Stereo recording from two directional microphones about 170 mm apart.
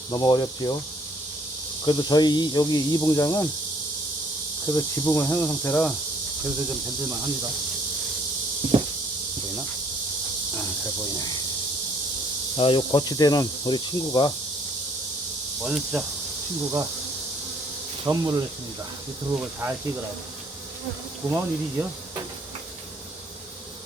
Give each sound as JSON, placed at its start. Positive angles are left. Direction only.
{"t": 0.1, "sound": "speech", "side_deg": 25}
{"t": 1.8, "sound": "speech", "side_deg": 25}
{"t": 4.7, "sound": "cricket", "side_deg": 15}
{"t": 8.6, "sound": "a sound", "side_deg": -30}
{"t": 12.5, "sound": "speech", "side_deg": 30}
{"t": 15.6, "sound": "insect", "side_deg": 0}
{"t": 18.0, "sound": "speech", "side_deg": -25}
{"t": 19.4, "sound": "speech", "side_deg": -10}
{"t": 21.2, "sound": "speech", "side_deg": -10}